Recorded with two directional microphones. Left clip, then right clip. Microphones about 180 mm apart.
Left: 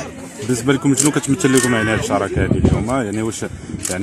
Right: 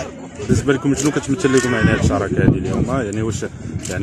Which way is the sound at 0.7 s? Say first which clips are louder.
Left 2 dB; 50° left (ahead or behind).